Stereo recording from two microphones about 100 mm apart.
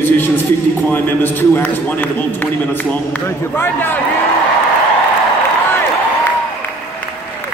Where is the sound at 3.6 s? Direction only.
20° left (ahead or behind).